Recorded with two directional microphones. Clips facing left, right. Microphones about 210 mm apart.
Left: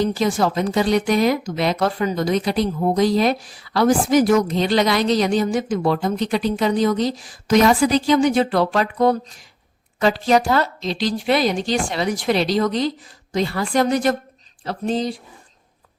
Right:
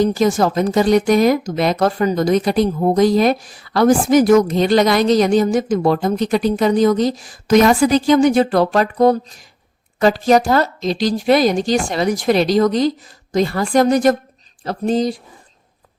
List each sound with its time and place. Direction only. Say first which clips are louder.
0.0 s a woman's voice: right 4 dB; 45° right (ahead or behind)